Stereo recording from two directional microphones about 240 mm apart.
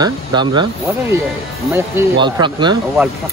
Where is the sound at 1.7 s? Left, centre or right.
Centre.